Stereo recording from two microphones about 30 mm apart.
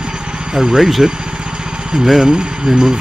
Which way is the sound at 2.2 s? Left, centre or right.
Right.